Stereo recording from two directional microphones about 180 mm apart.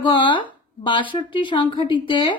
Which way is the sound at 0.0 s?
25° left (ahead or behind).